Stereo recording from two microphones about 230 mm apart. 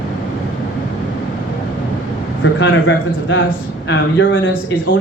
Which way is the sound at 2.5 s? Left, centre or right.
Left.